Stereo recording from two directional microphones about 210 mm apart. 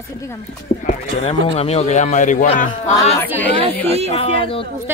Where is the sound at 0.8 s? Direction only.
30° left (ahead or behind).